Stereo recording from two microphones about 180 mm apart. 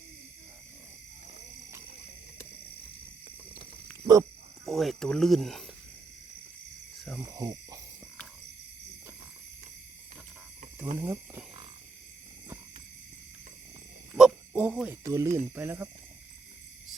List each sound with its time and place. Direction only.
4.0 s speech: 20° right (ahead or behind)
4.6 s speech: centre (ahead or behind)
7.2 s speech: 20° right (ahead or behind)
10.9 s speech: 15° right (ahead or behind)
14.2 s a sound: 5° right (ahead or behind)
15.0 s speech: 15° right (ahead or behind)